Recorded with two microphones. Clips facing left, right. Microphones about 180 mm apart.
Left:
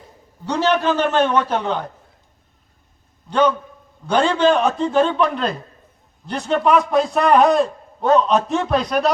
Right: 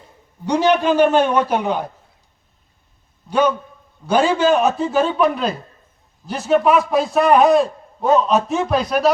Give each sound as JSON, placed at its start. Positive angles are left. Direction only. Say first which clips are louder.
{"t": 0.4, "sound": "a man's voice", "louder": "right 2 dB", "side_deg": -15}
{"t": 3.2, "sound": "a man's voice", "louder": "even", "side_deg": -10}